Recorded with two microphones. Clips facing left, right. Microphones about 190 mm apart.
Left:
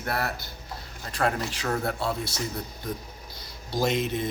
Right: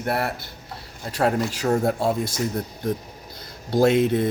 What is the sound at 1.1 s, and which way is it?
Speech, 40° right (ahead or behind).